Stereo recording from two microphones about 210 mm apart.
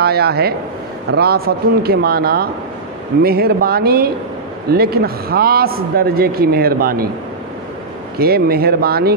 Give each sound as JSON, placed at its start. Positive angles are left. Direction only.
{"t": 0.0, "sound": "a man's voice", "side_deg": -50}
{"t": 8.2, "sound": "a man's voice", "side_deg": -45}